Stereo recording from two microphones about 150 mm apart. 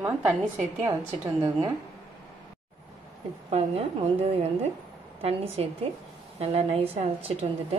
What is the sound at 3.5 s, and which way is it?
A woman's voice, 40° right (ahead or behind).